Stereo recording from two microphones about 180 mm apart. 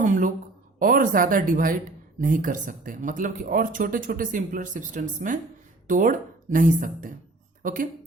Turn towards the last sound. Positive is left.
turn(degrees=-50)  # may be behind; listen again after turning